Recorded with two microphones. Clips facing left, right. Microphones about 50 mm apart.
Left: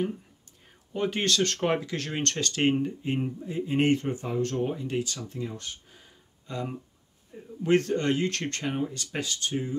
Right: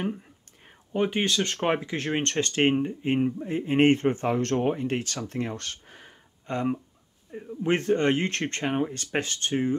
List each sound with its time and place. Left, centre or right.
0.9 s speech: centre; by 6.8 s right
7.3 s speech: right